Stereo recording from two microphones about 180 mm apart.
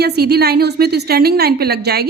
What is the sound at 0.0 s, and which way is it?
A woman's voice, 60° right (ahead or behind).